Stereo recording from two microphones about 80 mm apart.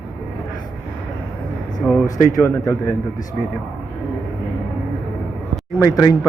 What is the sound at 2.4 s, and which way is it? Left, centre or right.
Speech, left.